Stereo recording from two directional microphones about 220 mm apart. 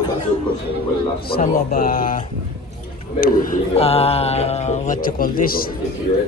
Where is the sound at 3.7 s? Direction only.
25° left (ahead or behind).